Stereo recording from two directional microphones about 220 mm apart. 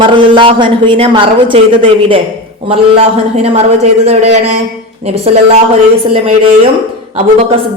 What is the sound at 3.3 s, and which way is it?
A woman's voice, 30° right (ahead or behind).